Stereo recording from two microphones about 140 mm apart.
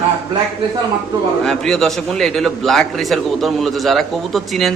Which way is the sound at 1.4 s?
5° left (ahead or behind).